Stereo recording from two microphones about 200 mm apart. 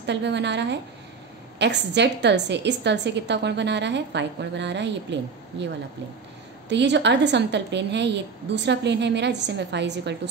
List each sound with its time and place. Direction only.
0.0 s a woman's voice: 60° right (ahead or behind)
6.7 s a woman's voice: 60° right (ahead or behind)